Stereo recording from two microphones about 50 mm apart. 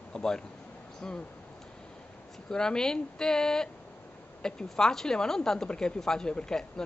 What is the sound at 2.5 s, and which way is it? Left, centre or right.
Speech, centre.